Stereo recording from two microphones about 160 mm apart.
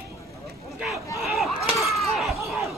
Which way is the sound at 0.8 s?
Centre (ahead or behind).